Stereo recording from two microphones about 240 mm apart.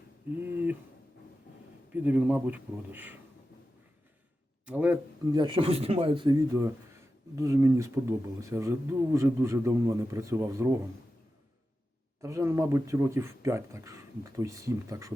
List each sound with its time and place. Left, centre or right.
0.3 s speech: centre
1.9 s speech: centre
4.6 s speech: centre
5.4 s speech: right
12.2 s speech: centre